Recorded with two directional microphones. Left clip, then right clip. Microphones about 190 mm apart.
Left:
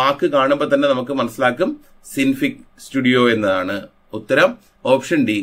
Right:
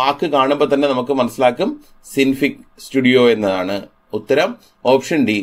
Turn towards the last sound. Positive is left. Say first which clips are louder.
# right 1 dB
turn(degrees=-10)  # may be behind; listen again after turning